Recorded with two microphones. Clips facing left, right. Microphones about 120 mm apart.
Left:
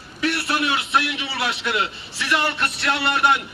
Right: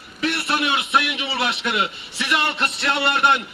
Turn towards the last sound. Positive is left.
turn(degrees=-25)  # may be behind; listen again after turning